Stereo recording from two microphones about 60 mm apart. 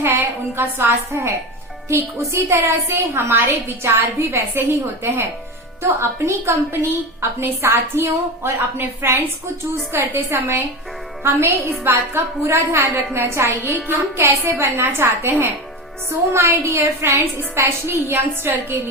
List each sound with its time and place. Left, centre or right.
0.0 s a woman's voice: right
17.6 s a woman's voice: right